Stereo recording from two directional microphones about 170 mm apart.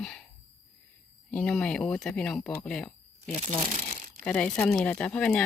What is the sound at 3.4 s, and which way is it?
Speech, 45° right (ahead or behind).